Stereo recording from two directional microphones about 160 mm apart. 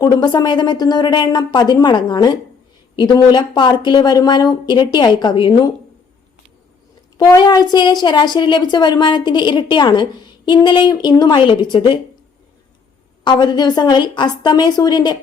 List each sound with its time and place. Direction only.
0.0 s a woman's voice: 25° left (ahead or behind)
7.3 s a woman's voice: 25° left (ahead or behind)
13.2 s a woman's voice: 30° left (ahead or behind)